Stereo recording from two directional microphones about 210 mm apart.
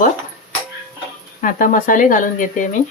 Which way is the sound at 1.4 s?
40° left (ahead or behind).